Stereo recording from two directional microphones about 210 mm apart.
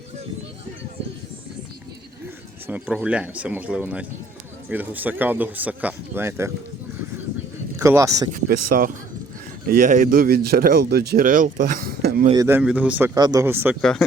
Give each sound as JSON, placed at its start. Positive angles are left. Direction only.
{"t": 2.6, "sound": "speech", "side_deg": -5}
{"t": 7.8, "sound": "speech", "side_deg": -15}
{"t": 8.4, "sound": "speech", "side_deg": -40}
{"t": 12.3, "sound": "speech", "side_deg": -15}
{"t": 13.1, "sound": "speech", "side_deg": -15}